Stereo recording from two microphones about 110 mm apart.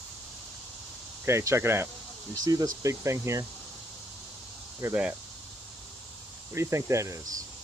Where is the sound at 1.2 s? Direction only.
25° right (ahead or behind).